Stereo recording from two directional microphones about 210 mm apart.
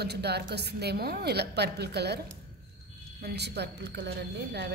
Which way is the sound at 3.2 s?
50° right (ahead or behind).